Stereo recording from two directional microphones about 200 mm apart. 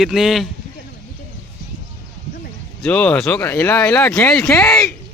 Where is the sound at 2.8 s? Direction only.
5° left (ahead or behind).